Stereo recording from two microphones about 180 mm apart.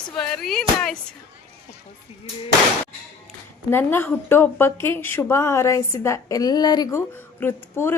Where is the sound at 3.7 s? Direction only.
10° left (ahead or behind).